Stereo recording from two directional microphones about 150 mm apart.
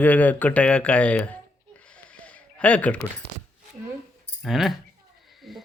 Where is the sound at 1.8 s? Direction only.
10° left (ahead or behind).